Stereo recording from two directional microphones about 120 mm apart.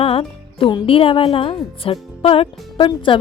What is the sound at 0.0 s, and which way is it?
Music, 50° left (ahead or behind).